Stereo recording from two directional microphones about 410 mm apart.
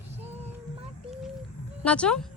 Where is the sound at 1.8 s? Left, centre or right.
Centre.